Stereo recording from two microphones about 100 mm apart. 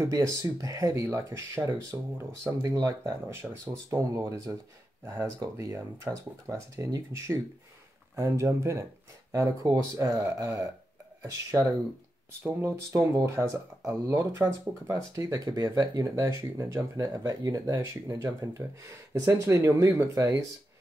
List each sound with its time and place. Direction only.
0.0 s speech: 30° right (ahead or behind)
12.4 s speech: 25° right (ahead or behind)
14.9 s speech: 35° right (ahead or behind)